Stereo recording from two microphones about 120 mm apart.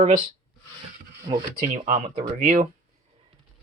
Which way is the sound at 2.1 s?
70° right (ahead or behind).